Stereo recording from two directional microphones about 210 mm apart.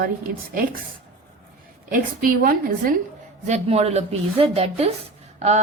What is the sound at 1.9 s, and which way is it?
A woman's voice, 40° right (ahead or behind).